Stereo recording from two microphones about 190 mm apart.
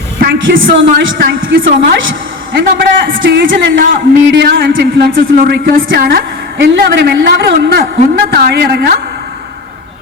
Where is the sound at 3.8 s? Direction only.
55° right (ahead or behind).